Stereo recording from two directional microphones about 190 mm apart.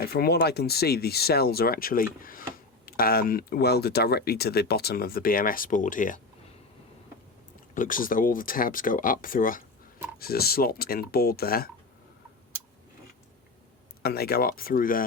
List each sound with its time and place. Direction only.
0.0 s speech: 55° left (ahead or behind)
7.7 s speech: 45° left (ahead or behind)
14.0 s speech: 55° left (ahead or behind)